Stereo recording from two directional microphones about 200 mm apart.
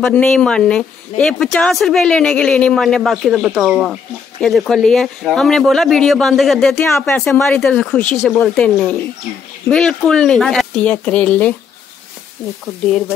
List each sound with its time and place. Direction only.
0.0 s speech: 5° left (ahead or behind)